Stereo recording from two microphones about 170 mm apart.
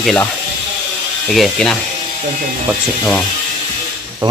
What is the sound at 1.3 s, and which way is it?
Speech, centre (ahead or behind).